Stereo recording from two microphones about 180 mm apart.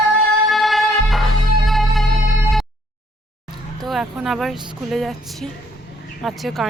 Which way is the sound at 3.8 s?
Centre (ahead or behind).